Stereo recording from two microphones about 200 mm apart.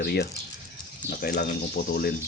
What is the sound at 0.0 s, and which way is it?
Speech, 55° left (ahead or behind).